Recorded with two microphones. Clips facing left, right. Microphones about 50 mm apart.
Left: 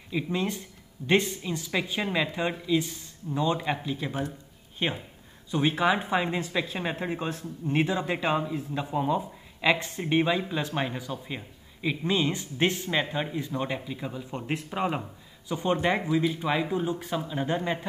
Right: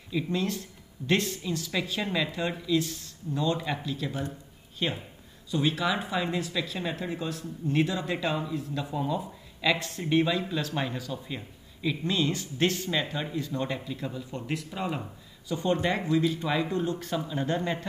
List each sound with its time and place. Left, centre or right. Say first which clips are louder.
0.1 s speech: even; centre
14.4 s speech: left 4 dB; left; by 17.8 s centre